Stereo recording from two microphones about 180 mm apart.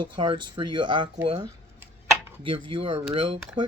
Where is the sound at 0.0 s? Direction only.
30° right (ahead or behind).